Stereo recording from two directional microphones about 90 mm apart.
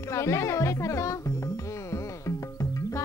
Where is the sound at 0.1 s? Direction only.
35° left (ahead or behind).